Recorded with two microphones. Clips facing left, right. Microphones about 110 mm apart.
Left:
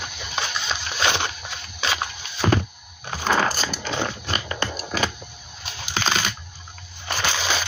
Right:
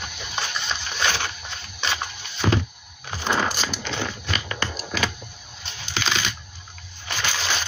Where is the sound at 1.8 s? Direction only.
Centre (ahead or behind).